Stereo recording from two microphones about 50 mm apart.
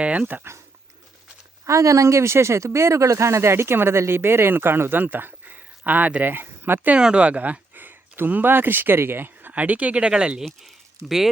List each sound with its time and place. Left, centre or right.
0.0 s speech: right
1.6 s speech: right
6.7 s speech: right
9.5 s speech: right; by 10.4 s centre